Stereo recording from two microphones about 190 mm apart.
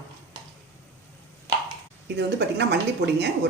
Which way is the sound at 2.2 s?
60° right (ahead or behind).